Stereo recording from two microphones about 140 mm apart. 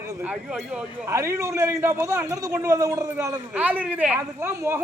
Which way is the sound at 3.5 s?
10° right (ahead or behind).